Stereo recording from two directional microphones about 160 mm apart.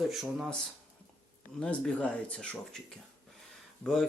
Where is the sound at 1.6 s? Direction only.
5° left (ahead or behind).